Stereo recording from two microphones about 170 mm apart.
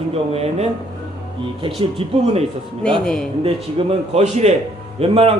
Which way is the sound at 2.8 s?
5° left (ahead or behind).